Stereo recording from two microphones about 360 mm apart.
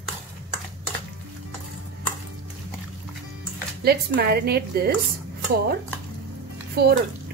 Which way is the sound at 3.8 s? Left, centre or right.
Right.